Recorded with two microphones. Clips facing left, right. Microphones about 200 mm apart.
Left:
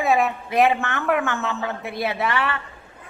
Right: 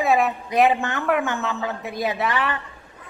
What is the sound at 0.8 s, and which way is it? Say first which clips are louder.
Speech: right 1 dB; 15° right (ahead or behind).